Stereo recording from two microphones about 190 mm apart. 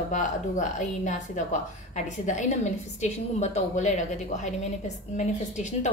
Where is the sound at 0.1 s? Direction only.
40° left (ahead or behind).